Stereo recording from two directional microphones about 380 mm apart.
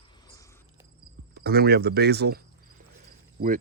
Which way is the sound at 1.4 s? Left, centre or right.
Right.